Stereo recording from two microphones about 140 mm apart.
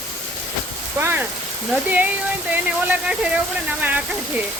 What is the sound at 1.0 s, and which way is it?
Speech, 15° right (ahead or behind).